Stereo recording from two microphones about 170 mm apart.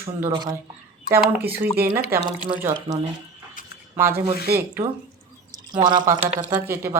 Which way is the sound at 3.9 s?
15° right (ahead or behind).